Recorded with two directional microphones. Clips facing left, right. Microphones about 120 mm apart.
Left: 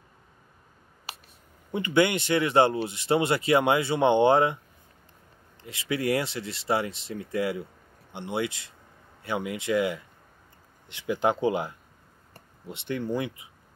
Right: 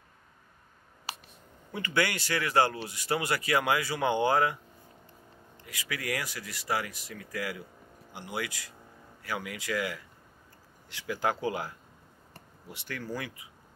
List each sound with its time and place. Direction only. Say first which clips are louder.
1.7 s speech: left 7 dB; 20° left (ahead or behind)
5.7 s speech: left 9 dB; 25° left (ahead or behind)